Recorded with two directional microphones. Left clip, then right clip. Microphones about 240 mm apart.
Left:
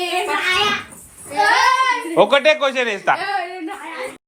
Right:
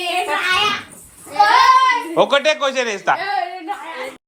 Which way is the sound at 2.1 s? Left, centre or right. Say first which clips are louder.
Left 2 dB; centre.